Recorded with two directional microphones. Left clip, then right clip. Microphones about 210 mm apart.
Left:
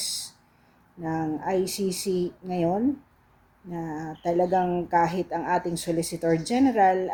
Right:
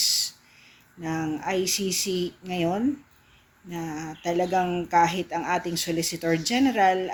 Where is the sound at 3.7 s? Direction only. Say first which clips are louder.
Even; 10° right (ahead or behind).